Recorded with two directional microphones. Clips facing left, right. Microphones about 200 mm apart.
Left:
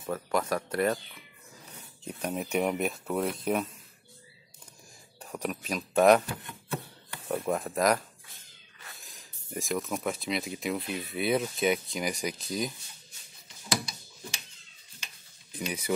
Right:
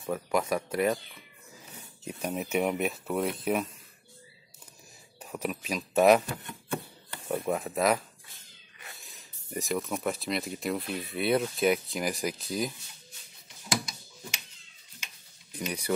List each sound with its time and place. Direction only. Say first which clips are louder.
0.0 s speech: right 1 dB; 10° right (ahead or behind)
5.2 s a man's voice: even; 5° right (ahead or behind)
7.2 s speech: even; centre (ahead or behind)
15.6 s speech: even; centre (ahead or behind)